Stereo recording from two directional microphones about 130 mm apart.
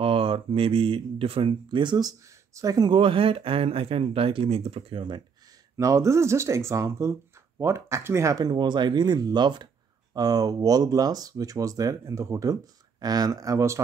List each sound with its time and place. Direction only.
0.0 s speech: 45° right (ahead or behind)
5.8 s speech: 25° right (ahead or behind)